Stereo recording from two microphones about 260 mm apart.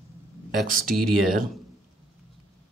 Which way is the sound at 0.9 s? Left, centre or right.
Centre.